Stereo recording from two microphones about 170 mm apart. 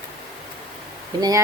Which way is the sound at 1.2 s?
20° right (ahead or behind).